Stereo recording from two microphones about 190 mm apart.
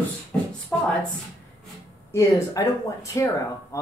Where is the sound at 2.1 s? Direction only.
15° left (ahead or behind).